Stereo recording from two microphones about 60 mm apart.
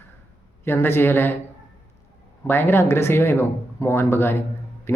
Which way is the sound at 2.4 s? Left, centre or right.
Left.